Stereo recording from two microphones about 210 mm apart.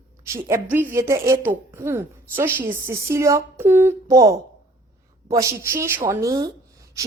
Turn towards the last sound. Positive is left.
turn(degrees=-15)  # may be behind; listen again after turning